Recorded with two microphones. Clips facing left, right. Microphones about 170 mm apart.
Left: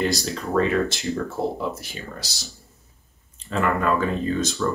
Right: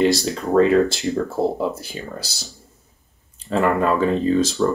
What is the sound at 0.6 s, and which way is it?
Speech, 30° right (ahead or behind).